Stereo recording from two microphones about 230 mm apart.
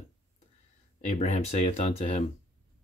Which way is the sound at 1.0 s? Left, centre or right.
Left.